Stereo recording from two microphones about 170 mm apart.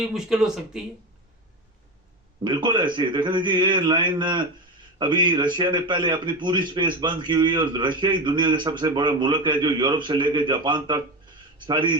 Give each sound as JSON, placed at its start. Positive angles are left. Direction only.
{"t": 0.1, "sound": "speech", "side_deg": -5}
{"t": 2.4, "sound": "a man's voice", "side_deg": -25}